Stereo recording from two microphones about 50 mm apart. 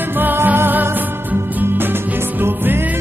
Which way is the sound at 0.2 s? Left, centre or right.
Right.